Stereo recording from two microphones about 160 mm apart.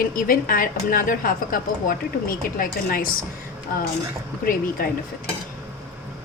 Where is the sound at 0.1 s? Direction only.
65° left (ahead or behind).